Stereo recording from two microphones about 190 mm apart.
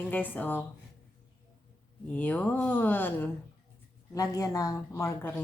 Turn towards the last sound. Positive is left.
turn(degrees=10)  # may be behind; listen again after turning